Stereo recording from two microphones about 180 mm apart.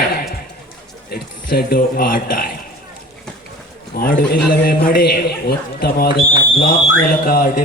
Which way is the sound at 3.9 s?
55° left (ahead or behind).